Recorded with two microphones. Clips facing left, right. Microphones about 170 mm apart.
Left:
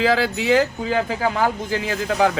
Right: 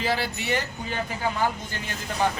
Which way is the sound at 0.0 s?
90° left.